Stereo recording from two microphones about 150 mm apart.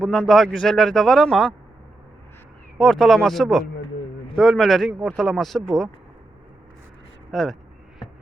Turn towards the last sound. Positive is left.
turn(degrees=0)  # may be behind; listen again after turning